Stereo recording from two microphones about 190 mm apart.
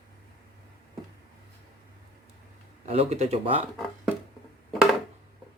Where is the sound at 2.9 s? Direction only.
35° right (ahead or behind).